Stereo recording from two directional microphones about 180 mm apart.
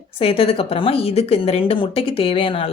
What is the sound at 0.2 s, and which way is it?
Speech, 30° left (ahead or behind).